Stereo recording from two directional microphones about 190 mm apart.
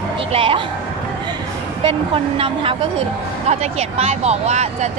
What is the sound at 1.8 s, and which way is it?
A woman's voice, 30° right (ahead or behind).